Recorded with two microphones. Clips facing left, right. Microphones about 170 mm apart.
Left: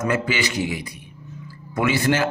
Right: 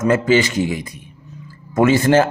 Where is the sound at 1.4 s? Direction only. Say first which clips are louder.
Right 8 dB; 45° right (ahead or behind).